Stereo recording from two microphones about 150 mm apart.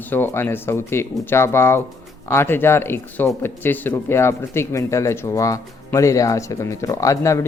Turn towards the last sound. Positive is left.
turn(degrees=20)  # may be behind; listen again after turning